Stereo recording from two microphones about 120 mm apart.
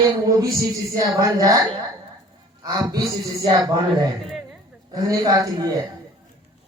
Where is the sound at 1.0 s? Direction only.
30° right (ahead or behind).